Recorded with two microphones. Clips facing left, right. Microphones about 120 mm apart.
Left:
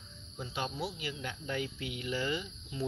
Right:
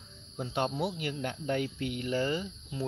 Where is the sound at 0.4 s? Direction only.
55° right (ahead or behind).